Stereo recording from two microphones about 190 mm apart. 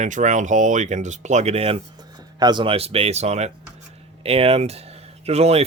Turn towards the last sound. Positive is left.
turn(degrees=-35)  # may be behind; listen again after turning